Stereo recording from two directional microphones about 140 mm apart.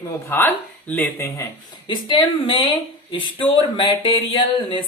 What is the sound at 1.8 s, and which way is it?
Speech, 40° left (ahead or behind).